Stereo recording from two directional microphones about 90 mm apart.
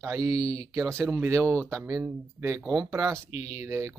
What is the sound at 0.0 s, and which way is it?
Speech, 40° right (ahead or behind).